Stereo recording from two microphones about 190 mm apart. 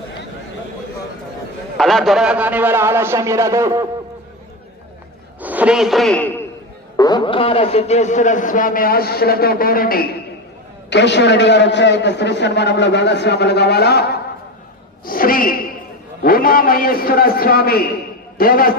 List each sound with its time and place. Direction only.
1.8 s a man's voice: centre (ahead or behind); by 3.8 s 15° right (ahead or behind)
5.4 s a man's voice: 10° right (ahead or behind); by 6.4 s 10° left (ahead or behind)
6.9 s a man's voice: 20° left (ahead or behind); by 10.1 s 50° left (ahead or behind)
10.8 s a man's voice: 65° left (ahead or behind)